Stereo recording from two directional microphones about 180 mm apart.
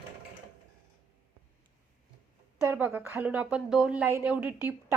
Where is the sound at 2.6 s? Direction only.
10° right (ahead or behind).